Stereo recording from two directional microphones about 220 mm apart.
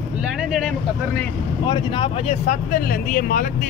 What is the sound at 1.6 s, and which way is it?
Speech, 20° left (ahead or behind).